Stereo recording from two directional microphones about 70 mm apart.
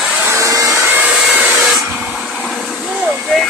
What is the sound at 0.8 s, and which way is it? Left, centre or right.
Hair dryer, right.